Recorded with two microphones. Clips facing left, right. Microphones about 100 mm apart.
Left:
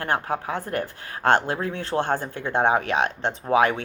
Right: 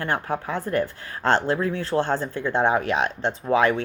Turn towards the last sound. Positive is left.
turn(degrees=55)  # may be behind; listen again after turning